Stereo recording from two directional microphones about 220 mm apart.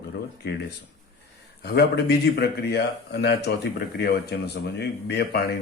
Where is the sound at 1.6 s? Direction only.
50° left (ahead or behind).